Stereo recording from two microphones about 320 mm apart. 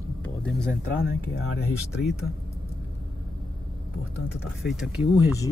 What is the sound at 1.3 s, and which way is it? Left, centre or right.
Speech, left.